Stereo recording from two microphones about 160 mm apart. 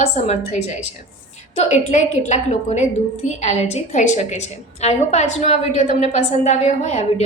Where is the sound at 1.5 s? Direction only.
45° left (ahead or behind).